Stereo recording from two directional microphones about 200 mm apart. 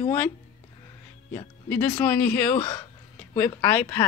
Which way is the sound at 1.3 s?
10° left (ahead or behind).